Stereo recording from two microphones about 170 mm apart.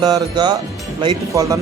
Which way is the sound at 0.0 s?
25° right (ahead or behind).